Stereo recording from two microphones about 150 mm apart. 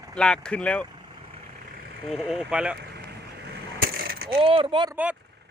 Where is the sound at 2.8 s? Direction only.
90° right.